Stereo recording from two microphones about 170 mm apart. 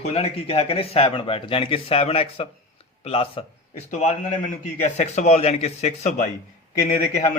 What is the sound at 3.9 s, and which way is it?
A man's voice, 45° left (ahead or behind).